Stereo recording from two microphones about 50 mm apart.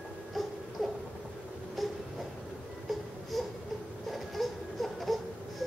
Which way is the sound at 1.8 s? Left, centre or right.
Centre.